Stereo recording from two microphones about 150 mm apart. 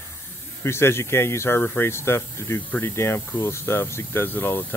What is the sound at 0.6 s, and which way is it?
Speech, 15° left (ahead or behind).